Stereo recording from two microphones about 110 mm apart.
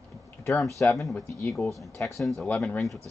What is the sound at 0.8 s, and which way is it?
Speech, 15° left (ahead or behind).